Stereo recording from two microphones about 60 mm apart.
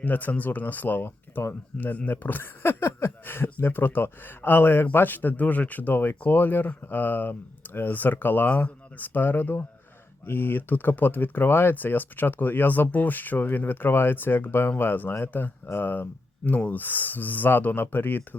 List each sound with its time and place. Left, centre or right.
0.0 s speech: left